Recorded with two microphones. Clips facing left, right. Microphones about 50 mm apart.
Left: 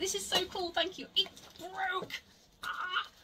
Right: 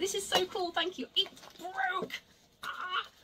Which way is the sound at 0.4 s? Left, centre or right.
Centre.